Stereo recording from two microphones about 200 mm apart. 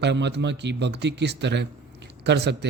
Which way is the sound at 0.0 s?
60° right (ahead or behind).